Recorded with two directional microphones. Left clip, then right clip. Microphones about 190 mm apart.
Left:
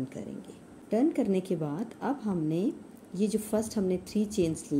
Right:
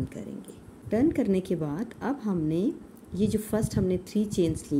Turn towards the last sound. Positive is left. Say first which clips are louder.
# right 2 dB
turn(degrees=-15)  # may be behind; listen again after turning